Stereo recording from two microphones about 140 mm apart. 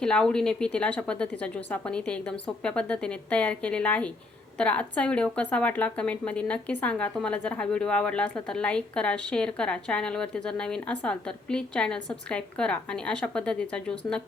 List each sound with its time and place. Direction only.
0.0 s a woman's voice: 5° left (ahead or behind)